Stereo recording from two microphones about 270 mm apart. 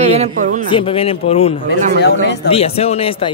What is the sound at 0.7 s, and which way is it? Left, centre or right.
Speech, centre.